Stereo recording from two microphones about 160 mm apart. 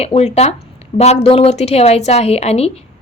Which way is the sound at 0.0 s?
40° left (ahead or behind).